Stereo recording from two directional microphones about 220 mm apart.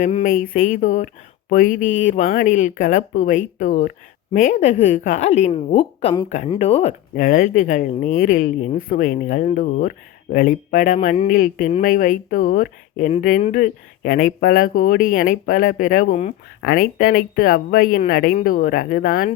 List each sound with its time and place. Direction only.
0.0 s speech: 35° left (ahead or behind)
7.2 s speech: 40° left (ahead or behind)